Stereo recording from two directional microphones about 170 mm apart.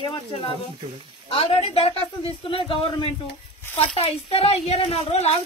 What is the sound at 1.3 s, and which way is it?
Speech, 35° left (ahead or behind).